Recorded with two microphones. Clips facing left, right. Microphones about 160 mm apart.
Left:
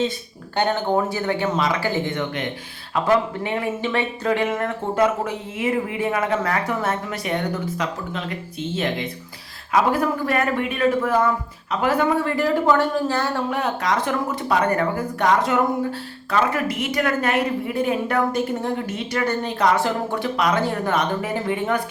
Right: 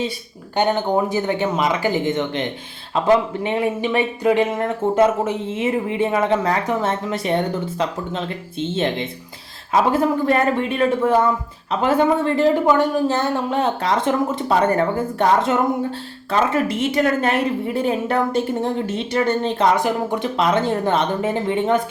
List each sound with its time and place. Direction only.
0.5 s a woman's voice: 15° right (ahead or behind)